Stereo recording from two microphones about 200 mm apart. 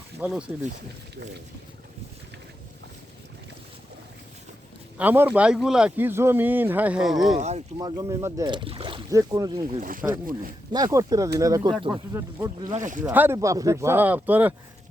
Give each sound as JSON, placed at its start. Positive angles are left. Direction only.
{"t": 0.2, "sound": "speech", "side_deg": -5}
{"t": 4.9, "sound": "speech", "side_deg": -10}
{"t": 7.3, "sound": "speech", "side_deg": -35}
{"t": 7.8, "sound": "speech", "side_deg": -20}
{"t": 9.7, "sound": "speech", "side_deg": -40}
{"t": 10.7, "sound": "speech", "side_deg": -20}
{"t": 12.7, "sound": "speech", "side_deg": -40}
{"t": 13.1, "sound": "speech", "side_deg": -15}